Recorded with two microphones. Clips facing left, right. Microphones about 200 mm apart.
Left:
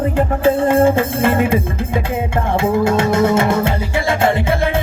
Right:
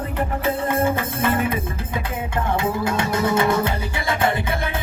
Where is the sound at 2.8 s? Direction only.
25° left (ahead or behind).